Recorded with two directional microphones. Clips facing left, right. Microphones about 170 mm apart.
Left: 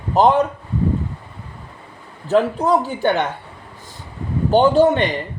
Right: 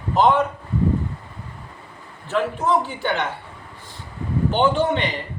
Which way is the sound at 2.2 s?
40° left (ahead or behind).